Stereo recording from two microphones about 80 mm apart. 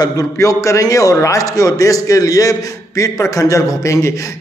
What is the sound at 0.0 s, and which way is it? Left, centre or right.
A man's voice, left.